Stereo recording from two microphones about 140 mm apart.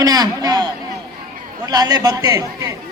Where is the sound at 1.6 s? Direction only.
30° right (ahead or behind).